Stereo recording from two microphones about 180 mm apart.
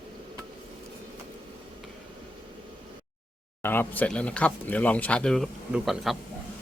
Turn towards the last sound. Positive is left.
turn(degrees=0)  # may be behind; listen again after turning